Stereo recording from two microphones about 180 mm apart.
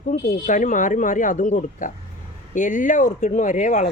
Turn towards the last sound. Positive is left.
turn(degrees=45)  # may be behind; listen again after turning